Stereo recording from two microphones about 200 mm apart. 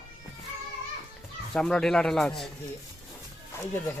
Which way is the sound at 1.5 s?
5° left (ahead or behind).